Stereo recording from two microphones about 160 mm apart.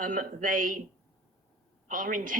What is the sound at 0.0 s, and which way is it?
Speech, 55° right (ahead or behind).